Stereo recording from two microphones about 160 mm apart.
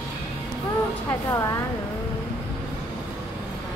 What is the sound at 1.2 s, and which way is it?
Speech, 20° left (ahead or behind).